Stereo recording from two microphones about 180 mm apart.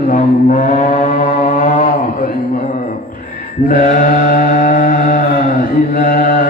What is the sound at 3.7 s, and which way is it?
Mantra, 50° left (ahead or behind).